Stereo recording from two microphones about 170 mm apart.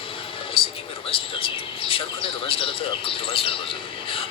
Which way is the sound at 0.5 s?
30° left (ahead or behind).